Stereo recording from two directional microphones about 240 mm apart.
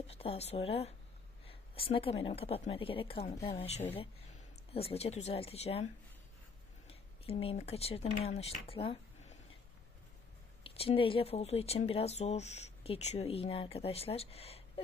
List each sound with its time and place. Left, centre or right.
0.1 s speech: left
10.6 s speech: left